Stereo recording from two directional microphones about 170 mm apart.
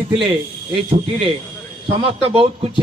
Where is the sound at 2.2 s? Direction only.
35° right (ahead or behind).